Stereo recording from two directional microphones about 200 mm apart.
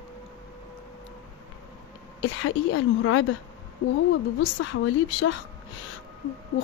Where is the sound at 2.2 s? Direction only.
80° left.